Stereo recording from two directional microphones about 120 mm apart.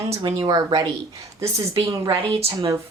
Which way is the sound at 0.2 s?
40° right (ahead or behind).